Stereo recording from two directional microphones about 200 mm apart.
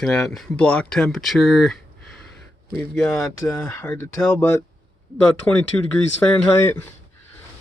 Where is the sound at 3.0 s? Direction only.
15° left (ahead or behind).